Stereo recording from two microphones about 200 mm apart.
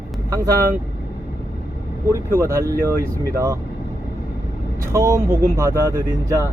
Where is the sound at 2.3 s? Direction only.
15° right (ahead or behind).